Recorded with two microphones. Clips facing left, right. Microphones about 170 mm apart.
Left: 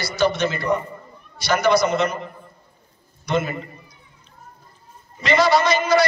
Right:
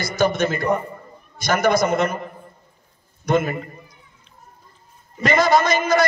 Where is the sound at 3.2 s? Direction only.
50° right (ahead or behind).